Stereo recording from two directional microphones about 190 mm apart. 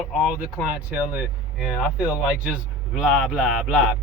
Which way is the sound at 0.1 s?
Centre (ahead or behind).